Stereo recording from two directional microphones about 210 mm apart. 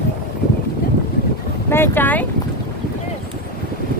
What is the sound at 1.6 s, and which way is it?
Speech, 10° left (ahead or behind).